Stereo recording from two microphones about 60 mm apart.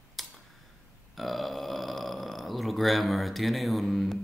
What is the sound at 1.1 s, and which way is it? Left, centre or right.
Speech, centre.